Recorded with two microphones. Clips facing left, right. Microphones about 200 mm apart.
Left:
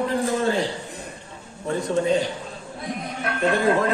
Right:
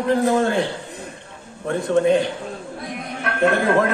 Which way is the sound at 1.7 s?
55° right (ahead or behind).